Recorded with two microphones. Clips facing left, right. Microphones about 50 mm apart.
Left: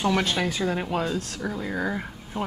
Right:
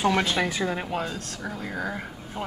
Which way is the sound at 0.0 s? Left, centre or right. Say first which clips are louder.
Right 1 dB; centre.